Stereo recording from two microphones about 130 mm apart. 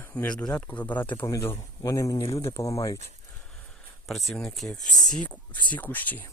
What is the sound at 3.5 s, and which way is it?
Speech, 5° left (ahead or behind).